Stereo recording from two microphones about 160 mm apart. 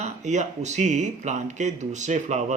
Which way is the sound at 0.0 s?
45° right (ahead or behind).